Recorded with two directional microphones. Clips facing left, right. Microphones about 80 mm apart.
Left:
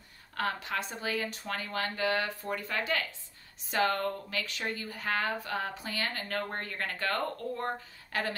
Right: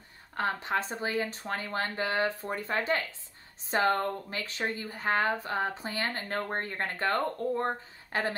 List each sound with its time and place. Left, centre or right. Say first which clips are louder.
0.4 s a woman's voice: right 3 dB; right